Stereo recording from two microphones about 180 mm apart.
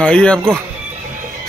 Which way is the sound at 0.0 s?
5° left (ahead or behind).